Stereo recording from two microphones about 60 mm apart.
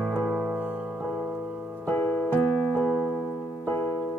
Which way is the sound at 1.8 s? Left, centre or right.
Left.